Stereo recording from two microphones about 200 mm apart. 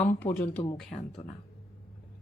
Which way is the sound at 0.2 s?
35° left (ahead or behind).